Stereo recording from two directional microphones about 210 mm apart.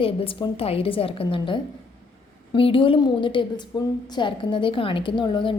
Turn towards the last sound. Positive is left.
turn(degrees=20)  # may be behind; listen again after turning